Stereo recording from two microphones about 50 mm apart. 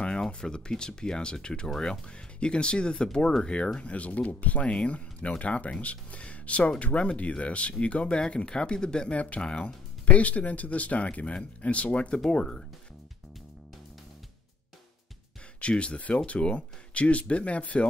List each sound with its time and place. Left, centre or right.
0.3 s speech: centre
15.6 s speech: centre